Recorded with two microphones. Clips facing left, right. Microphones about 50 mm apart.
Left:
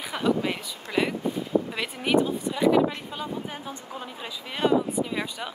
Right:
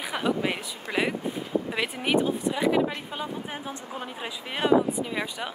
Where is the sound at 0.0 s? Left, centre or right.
Centre.